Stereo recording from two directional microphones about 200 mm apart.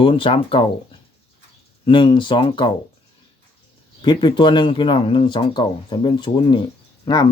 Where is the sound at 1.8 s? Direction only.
25° left (ahead or behind).